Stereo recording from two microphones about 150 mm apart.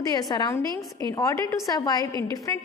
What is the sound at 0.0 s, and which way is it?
A woman's voice, 25° left (ahead or behind).